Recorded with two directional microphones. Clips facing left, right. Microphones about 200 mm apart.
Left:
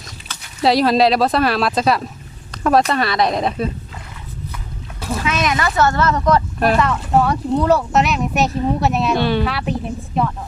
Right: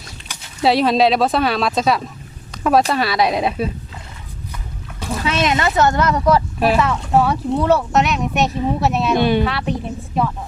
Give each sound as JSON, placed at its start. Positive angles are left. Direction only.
{"t": 0.6, "sound": "speech", "side_deg": 0}
{"t": 2.5, "sound": "a sound", "side_deg": 0}
{"t": 2.9, "sound": "speech", "side_deg": -5}
{"t": 5.2, "sound": "speech", "side_deg": -30}
{"t": 9.1, "sound": "speech", "side_deg": -15}
{"t": 9.4, "sound": "speech", "side_deg": 0}